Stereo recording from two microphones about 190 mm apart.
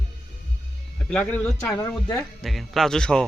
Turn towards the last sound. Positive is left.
turn(degrees=5)  # may be behind; listen again after turning